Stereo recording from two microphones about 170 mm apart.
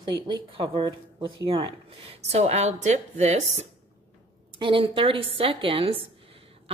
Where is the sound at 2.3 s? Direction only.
40° right (ahead or behind).